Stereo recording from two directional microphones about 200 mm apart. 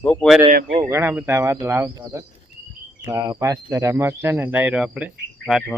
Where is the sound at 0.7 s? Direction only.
15° right (ahead or behind).